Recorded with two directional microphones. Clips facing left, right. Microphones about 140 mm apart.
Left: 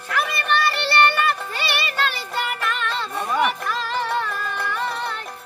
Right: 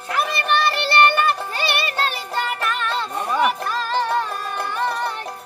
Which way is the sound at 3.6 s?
30° right (ahead or behind).